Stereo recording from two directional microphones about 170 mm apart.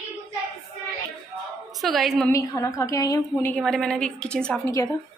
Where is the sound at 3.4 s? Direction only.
5° left (ahead or behind).